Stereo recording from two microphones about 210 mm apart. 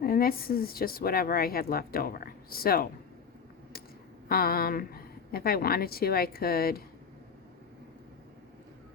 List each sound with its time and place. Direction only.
0.0 s speech: 45° left (ahead or behind)
4.3 s speech: 45° left (ahead or behind)